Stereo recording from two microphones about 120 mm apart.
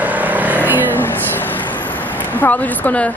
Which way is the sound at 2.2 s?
15° left (ahead or behind).